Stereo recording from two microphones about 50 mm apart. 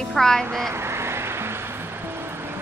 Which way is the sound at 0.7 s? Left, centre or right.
Right.